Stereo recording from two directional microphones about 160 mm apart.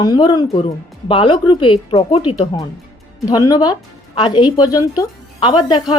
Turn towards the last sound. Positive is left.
turn(degrees=25)  # may be behind; listen again after turning